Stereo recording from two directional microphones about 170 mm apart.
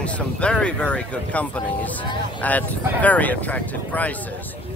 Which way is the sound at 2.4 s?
10° left (ahead or behind).